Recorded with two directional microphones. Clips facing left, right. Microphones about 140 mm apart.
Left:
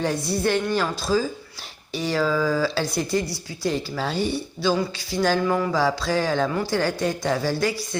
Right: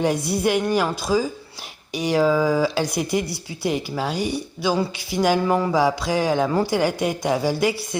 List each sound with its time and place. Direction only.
0.0 s speech: 20° right (ahead or behind)
6.5 s speech: 25° right (ahead or behind)
6.7 s speech: 15° right (ahead or behind)